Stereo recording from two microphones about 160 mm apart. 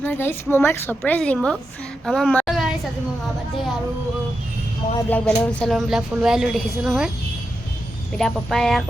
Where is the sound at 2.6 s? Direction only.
5° right (ahead or behind).